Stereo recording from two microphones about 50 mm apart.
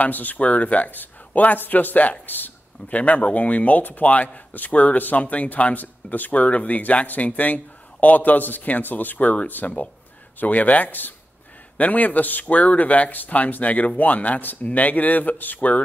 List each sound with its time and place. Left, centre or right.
0.0 s speech: left
3.0 s speech: left